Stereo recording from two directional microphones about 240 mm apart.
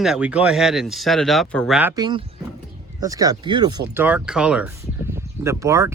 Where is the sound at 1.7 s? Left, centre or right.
Centre.